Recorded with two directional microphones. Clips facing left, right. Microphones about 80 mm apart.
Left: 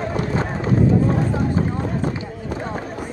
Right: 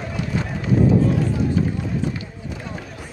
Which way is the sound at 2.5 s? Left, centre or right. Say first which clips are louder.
Left 7 dB; left.